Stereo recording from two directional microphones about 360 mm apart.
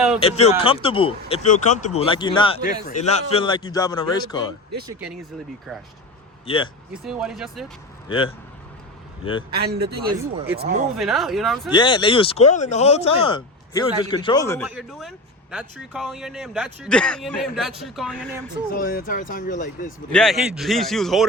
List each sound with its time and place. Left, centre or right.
0.2 s speech: centre
6.4 s speech: centre
6.9 s speech: centre
9.5 s speech: right
10.1 s speech: centre
10.9 s speech: centre
11.7 s speech: centre
18.7 s speech: left
20.1 s speech: centre